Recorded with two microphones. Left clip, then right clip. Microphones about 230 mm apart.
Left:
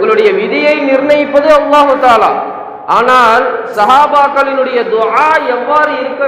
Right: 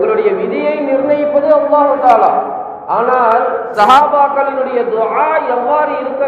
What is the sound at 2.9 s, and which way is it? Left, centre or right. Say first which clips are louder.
Mantra: left 5 dB; left.